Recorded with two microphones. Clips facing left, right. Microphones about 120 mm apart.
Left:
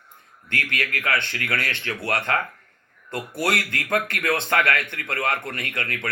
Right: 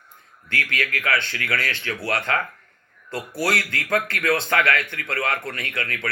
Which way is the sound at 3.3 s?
20° left (ahead or behind).